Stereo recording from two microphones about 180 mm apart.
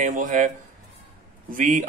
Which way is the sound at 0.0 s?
45° right (ahead or behind).